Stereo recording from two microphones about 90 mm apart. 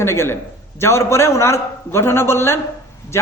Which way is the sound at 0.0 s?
30° left (ahead or behind).